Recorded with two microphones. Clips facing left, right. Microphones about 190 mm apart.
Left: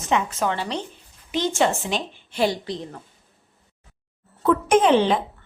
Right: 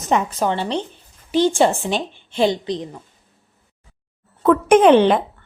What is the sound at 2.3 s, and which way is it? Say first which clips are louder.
Speech: right 4 dB; 25° right (ahead or behind).